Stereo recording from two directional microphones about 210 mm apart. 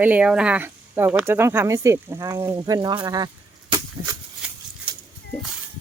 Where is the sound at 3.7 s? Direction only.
20° right (ahead or behind).